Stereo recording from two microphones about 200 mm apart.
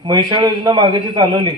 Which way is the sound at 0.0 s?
20° right (ahead or behind).